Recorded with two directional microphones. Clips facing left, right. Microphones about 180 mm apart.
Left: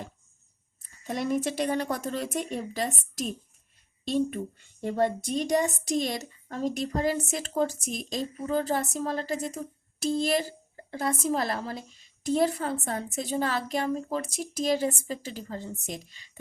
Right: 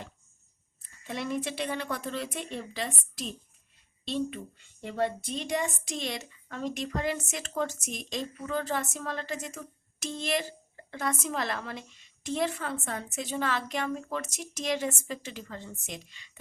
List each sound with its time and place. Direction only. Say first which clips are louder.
1.0 s a woman's voice: left 5 dB; 45° left (ahead or behind)